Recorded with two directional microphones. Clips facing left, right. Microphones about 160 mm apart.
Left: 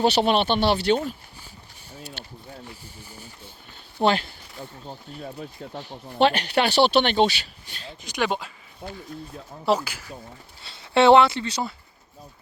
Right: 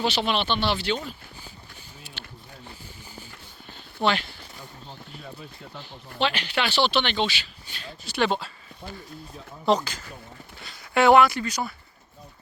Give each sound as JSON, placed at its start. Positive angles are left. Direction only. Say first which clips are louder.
{"t": 0.0, "sound": "speech", "louder": "left 5 dB", "side_deg": 45}
{"t": 4.0, "sound": "speech", "louder": "left 3 dB", "side_deg": 35}
{"t": 5.7, "sound": "speech", "louder": "left 7 dB", "side_deg": 50}
{"t": 8.0, "sound": "speech", "louder": "right 1 dB", "side_deg": 15}
{"t": 9.6, "sound": "speech", "louder": "even", "side_deg": 10}
{"t": 10.6, "sound": "speech", "louder": "left 3 dB", "side_deg": 30}